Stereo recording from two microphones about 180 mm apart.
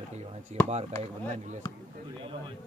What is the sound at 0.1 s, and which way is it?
Speech, 40° right (ahead or behind).